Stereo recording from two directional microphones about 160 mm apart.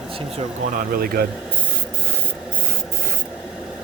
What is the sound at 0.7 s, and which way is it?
Speech, 65° right (ahead or behind).